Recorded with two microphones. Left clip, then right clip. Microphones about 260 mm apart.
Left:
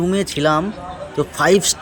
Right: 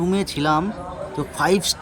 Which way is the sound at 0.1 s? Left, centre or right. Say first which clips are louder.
Left 3 dB; centre.